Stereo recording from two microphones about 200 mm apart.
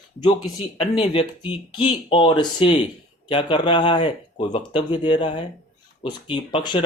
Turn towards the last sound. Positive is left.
turn(degrees=25)  # may be behind; listen again after turning